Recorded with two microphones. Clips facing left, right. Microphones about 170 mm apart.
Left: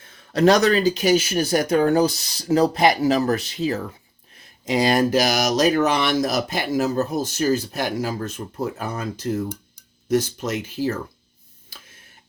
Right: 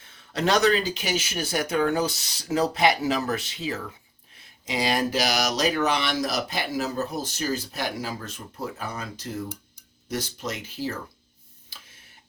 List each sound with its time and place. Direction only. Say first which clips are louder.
0.3 s speech: left 5 dB; 40° left (ahead or behind)